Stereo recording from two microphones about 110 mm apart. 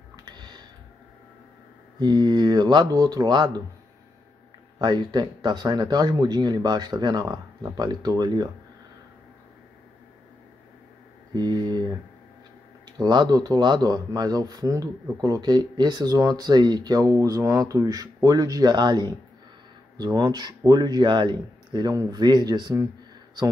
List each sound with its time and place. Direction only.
0.1 s tick-tock: 40° right (ahead or behind)
2.0 s speech: 40° right (ahead or behind)
4.7 s speech: 40° right (ahead or behind)
11.3 s speech: 40° right (ahead or behind)
12.9 s speech: 40° right (ahead or behind)